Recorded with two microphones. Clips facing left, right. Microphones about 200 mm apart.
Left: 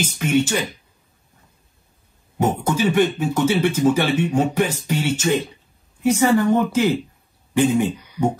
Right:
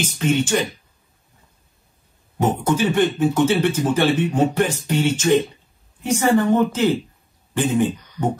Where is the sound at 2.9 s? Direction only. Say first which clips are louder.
Right 1 dB; 10° left (ahead or behind).